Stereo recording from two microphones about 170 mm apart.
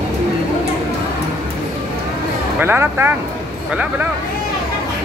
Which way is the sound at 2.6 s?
10° right (ahead or behind).